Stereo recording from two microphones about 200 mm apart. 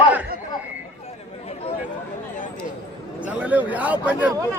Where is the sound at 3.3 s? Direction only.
5° right (ahead or behind).